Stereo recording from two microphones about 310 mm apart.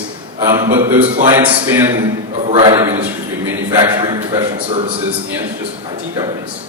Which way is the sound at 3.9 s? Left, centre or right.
Centre.